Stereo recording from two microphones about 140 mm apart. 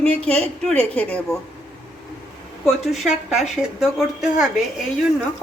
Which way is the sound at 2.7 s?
Centre (ahead or behind).